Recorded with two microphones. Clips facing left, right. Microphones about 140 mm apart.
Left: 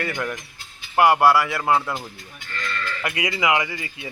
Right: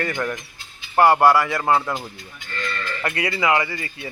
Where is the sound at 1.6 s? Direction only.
Centre (ahead or behind).